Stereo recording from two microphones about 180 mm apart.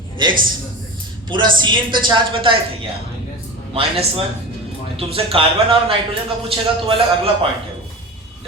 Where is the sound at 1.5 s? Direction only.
25° right (ahead or behind).